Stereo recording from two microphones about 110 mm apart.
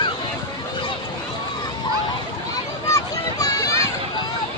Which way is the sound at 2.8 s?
30° left (ahead or behind).